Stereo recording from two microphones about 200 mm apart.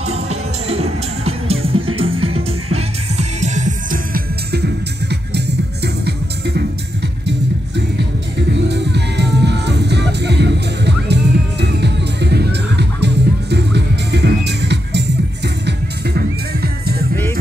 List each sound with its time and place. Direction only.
0.0 s music: 30° right (ahead or behind); by 6.6 s 55° right (ahead or behind)
8.4 s music: 60° right (ahead or behind)